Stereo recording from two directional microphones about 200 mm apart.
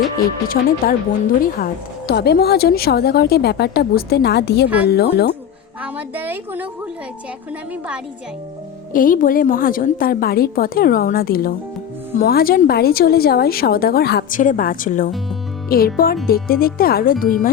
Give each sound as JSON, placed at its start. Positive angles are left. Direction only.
{"t": 0.4, "sound": "speech", "side_deg": 45}
{"t": 5.8, "sound": "a woman's voice", "side_deg": -10}
{"t": 8.9, "sound": "speech", "side_deg": 45}